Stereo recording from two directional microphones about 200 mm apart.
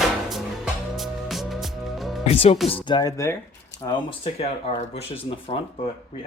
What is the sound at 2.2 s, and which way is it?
Speech, 30° left (ahead or behind).